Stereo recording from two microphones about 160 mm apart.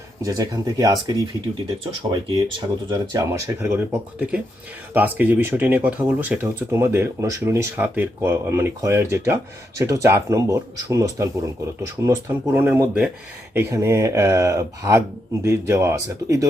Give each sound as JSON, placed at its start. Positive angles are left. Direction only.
{"t": 0.2, "sound": "speech", "side_deg": -20}